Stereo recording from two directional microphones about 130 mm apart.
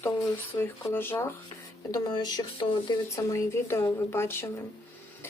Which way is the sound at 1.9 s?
30° left (ahead or behind).